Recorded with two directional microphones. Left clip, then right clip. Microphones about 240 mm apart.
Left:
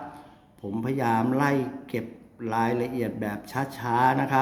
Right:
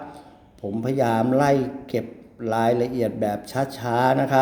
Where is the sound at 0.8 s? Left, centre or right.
Centre.